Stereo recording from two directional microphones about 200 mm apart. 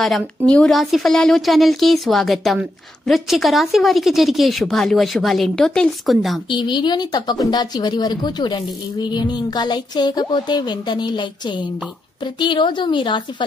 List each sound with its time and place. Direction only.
0.0 s a woman's voice: centre (ahead or behind)
6.5 s speech: 25° left (ahead or behind)